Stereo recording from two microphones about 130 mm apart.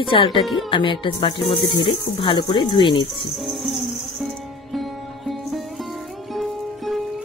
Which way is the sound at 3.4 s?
Centre (ahead or behind).